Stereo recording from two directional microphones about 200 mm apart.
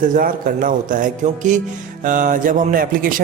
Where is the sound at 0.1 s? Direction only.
40° right (ahead or behind).